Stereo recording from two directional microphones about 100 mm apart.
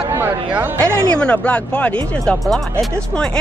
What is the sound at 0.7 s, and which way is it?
Speech, 10° left (ahead or behind).